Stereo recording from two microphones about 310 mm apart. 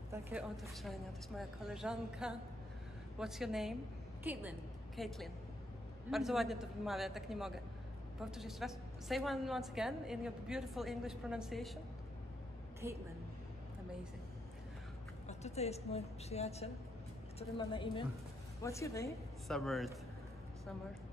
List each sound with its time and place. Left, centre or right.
0.1 s a woman's voice: centre
12.8 s a woman's voice: centre
15.2 s a woman's voice: left; by 19.9 s centre